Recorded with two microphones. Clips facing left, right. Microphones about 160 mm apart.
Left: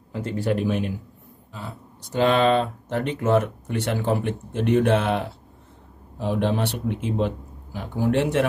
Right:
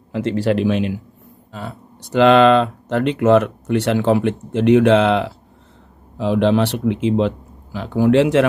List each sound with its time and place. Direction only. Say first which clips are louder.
0.1 s speech: right 6 dB; 90° right
1.5 s speech: right 6 dB; 70° right (ahead or behind); by 8.5 s 90° right